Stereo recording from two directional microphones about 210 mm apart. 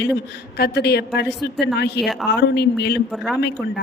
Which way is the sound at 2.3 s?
55° left (ahead or behind).